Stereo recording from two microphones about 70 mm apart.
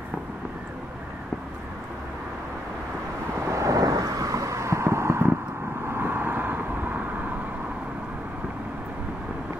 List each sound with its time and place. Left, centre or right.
3.3 s vehicle: right